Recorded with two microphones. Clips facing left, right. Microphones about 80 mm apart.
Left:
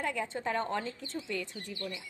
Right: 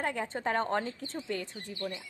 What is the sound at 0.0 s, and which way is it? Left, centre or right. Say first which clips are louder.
Speech: right 1 dB; right.